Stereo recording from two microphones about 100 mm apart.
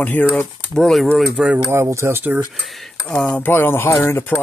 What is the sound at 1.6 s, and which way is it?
Speech, 30° right (ahead or behind).